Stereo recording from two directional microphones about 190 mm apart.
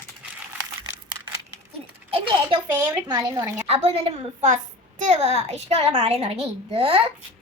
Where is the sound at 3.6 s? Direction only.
30° right (ahead or behind).